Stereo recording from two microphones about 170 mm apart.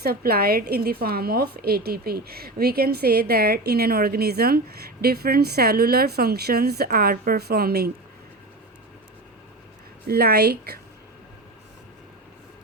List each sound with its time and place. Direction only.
0.0 s a woman's voice: 60° right (ahead or behind)
10.1 s a woman's voice: 65° right (ahead or behind)